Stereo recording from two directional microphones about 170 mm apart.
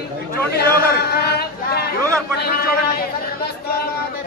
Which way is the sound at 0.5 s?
70° left (ahead or behind).